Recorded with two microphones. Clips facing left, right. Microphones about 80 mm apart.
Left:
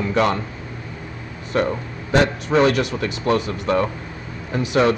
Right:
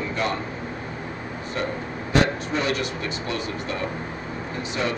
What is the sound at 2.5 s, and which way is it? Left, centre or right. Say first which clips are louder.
Speech: left 12 dB; left.